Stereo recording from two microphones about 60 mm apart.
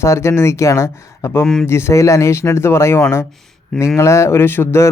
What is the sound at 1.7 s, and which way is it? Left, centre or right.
Speech, left.